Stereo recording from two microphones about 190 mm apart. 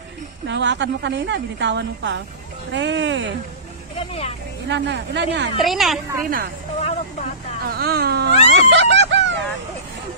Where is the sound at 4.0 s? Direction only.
30° left (ahead or behind).